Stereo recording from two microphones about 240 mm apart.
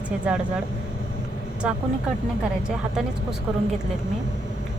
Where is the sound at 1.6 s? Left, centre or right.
Centre.